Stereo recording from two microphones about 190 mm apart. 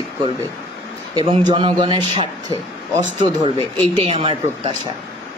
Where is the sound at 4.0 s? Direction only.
30° right (ahead or behind).